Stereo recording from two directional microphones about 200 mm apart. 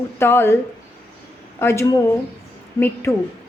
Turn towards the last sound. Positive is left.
turn(degrees=10)  # may be behind; listen again after turning